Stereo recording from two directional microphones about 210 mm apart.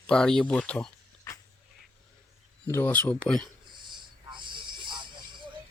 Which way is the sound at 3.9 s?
20° right (ahead or behind).